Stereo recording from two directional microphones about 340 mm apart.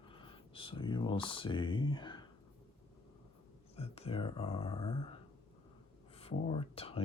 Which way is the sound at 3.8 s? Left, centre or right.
Centre.